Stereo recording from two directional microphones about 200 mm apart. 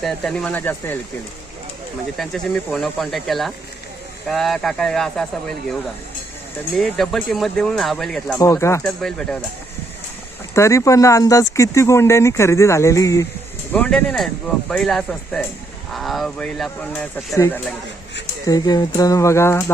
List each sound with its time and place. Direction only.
0.0 s speech: 5° left (ahead or behind)
2.1 s speech: centre (ahead or behind)
6.7 s speech: centre (ahead or behind)
8.4 s speech: 15° left (ahead or behind)
8.8 s speech: 5° left (ahead or behind)
10.5 s speech: 15° left (ahead or behind)
17.3 s speech: 15° left (ahead or behind)